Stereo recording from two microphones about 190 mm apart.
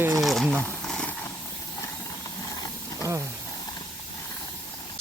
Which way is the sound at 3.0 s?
15° right (ahead or behind).